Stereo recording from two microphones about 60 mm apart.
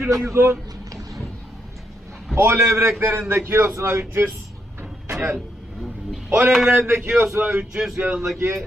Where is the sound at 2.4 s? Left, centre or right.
Right.